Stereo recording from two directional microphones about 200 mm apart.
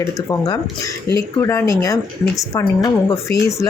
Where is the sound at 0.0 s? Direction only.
15° left (ahead or behind).